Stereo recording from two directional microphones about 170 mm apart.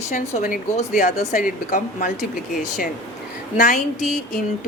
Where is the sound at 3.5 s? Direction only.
50° left (ahead or behind).